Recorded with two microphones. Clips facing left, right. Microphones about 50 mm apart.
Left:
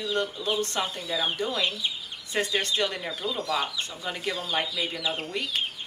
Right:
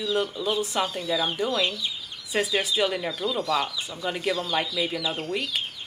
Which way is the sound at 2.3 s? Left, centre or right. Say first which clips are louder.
Right 2 dB; centre.